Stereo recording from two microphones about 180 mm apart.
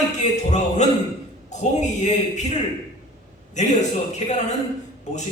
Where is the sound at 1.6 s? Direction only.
40° left (ahead or behind).